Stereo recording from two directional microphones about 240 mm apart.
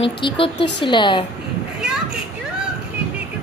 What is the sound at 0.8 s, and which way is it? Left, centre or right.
Speech, centre.